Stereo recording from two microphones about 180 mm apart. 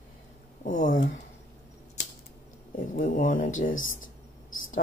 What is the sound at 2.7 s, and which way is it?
Speech, 45° left (ahead or behind).